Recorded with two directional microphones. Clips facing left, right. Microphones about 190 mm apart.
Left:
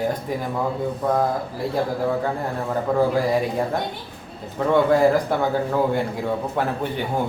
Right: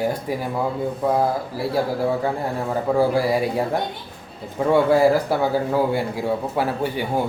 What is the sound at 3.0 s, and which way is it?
Speech, 10° right (ahead or behind).